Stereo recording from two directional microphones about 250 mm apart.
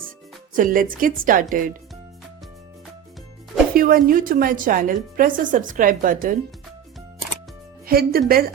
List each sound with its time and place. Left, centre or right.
0.5 s a woman's voice: right
3.8 s a woman's voice: right
7.9 s a woman's voice: right